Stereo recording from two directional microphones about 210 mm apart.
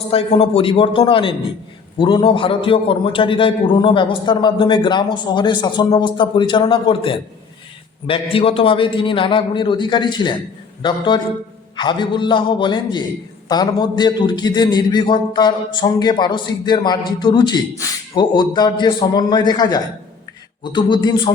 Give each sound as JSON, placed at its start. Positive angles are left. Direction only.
{"t": 0.1, "sound": "a man's voice", "side_deg": 30}